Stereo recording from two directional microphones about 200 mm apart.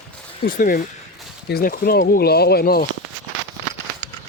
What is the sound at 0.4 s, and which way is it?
Speech, 45° left (ahead or behind).